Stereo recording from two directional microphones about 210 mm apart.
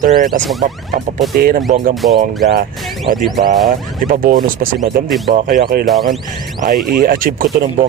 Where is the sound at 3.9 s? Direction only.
40° right (ahead or behind).